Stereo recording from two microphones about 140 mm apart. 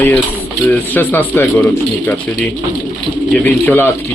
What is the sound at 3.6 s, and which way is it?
Speech, 15° left (ahead or behind).